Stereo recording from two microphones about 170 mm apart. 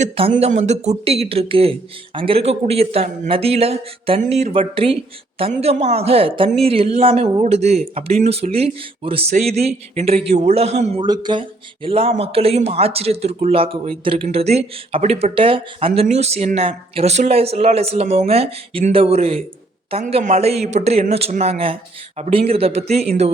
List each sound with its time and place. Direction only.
0.0 s speech: 35° right (ahead or behind)
11.0 s speech: 25° right (ahead or behind)